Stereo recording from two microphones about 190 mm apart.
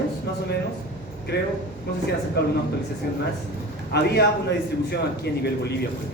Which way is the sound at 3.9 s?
60° left (ahead or behind).